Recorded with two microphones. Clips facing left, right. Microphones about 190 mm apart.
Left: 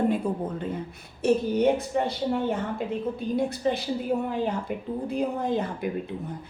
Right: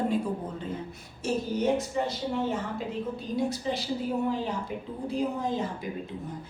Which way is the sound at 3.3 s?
55° left (ahead or behind).